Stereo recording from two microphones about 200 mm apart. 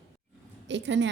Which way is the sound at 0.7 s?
65° right (ahead or behind).